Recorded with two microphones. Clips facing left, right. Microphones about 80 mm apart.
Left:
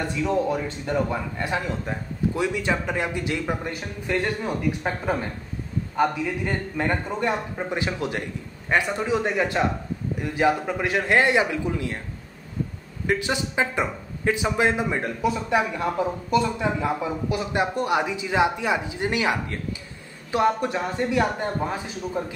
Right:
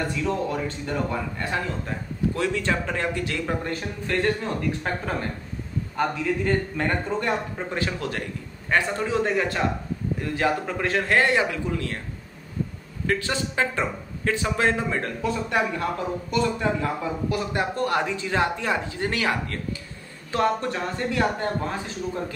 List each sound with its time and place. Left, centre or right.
0.0 s speech: centre
13.0 s speech: centre